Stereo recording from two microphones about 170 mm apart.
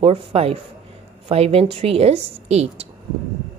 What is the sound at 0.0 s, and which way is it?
A woman's voice, 35° right (ahead or behind).